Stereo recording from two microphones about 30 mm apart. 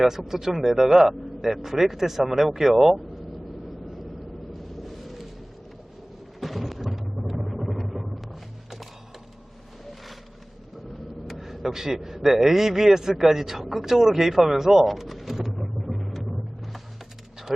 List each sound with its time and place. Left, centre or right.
0.0 s speech: centre
0.3 s a man's voice: centre
4.5 s vehicle: centre
6.4 s thunder: centre
7.0 s vehicle: centre
11.3 s vehicle: centre
11.7 s a man's voice: centre
14.8 s a sound: centre
15.4 s vehicle: centre